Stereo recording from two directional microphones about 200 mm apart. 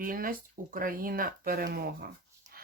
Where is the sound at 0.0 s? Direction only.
45° right (ahead or behind).